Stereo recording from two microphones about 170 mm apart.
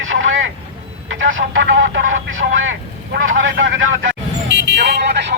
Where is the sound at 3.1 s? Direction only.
90° right.